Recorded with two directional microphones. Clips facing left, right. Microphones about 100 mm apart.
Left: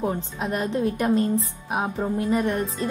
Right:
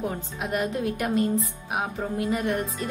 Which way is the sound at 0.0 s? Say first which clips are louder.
Left 4 dB; 35° left (ahead or behind).